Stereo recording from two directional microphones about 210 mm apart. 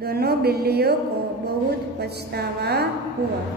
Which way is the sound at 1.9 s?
50° right (ahead or behind).